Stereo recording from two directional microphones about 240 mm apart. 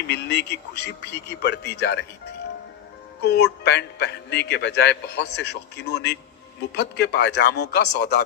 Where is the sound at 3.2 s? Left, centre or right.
Left.